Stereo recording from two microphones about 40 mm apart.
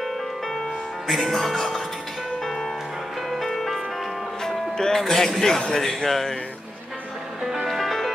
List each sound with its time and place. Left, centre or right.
1.0 s speech: centre
3.3 s music: centre
4.7 s a man's voice: centre
7.6 s music: centre